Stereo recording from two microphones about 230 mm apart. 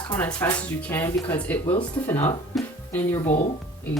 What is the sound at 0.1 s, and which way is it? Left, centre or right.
Speech, centre.